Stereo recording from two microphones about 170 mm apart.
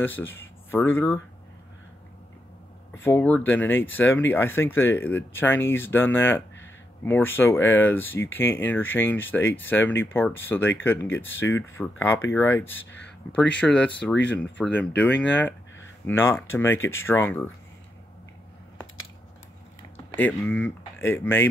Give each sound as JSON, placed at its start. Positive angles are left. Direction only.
{"t": 0.0, "sound": "speech", "side_deg": 10}
{"t": 2.9, "sound": "speech", "side_deg": 10}
{"t": 14.1, "sound": "speech", "side_deg": 90}
{"t": 14.4, "sound": "speech", "side_deg": 5}
{"t": 20.2, "sound": "speech", "side_deg": 10}